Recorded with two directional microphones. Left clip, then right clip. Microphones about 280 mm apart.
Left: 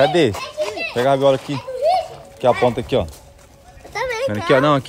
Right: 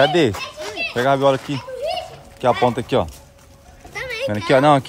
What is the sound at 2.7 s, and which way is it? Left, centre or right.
Speech, right.